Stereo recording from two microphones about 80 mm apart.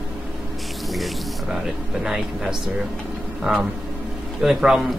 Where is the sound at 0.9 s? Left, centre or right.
Centre.